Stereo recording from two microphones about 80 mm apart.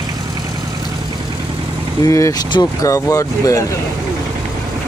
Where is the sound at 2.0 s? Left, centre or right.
Left.